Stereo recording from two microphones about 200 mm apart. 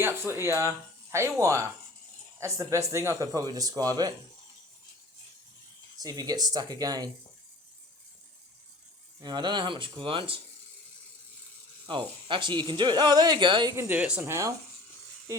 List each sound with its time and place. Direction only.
0.0 s speech: 10° right (ahead or behind)
6.0 s speech: 20° right (ahead or behind)
9.2 s speech: 20° right (ahead or behind)
11.9 s speech: 25° right (ahead or behind)